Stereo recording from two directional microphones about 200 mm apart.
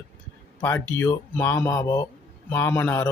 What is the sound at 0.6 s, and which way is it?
Speech, 15° left (ahead or behind).